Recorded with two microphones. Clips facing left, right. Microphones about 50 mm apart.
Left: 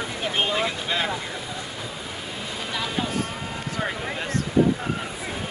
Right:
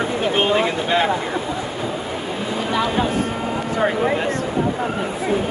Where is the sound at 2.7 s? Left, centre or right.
Right.